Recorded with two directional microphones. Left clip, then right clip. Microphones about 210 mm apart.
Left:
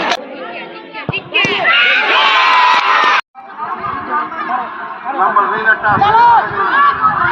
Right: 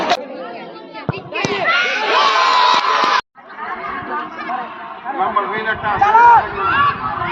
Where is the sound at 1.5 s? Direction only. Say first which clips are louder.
Left 4 dB; 50° right (ahead or behind).